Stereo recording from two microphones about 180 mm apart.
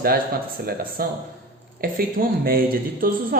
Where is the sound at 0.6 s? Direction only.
55° right (ahead or behind).